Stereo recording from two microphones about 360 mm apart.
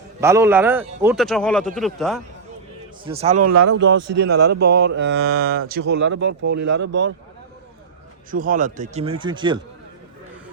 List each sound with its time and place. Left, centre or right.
0.2 s a man's voice: centre
3.0 s a man's voice: centre
3.4 s speech: right
3.8 s speech: right
4.9 s speech: right
5.4 s speech: right
8.3 s speech: right